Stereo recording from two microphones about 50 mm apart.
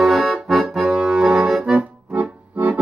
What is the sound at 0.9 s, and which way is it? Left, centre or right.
Accordion, centre.